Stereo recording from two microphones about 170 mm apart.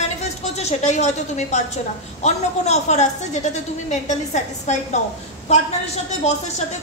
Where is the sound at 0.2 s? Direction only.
40° left (ahead or behind).